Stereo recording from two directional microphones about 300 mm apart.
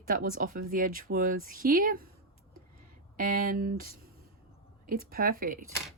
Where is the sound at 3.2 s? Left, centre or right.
Right.